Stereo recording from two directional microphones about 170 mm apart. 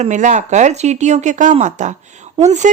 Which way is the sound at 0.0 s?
45° right (ahead or behind).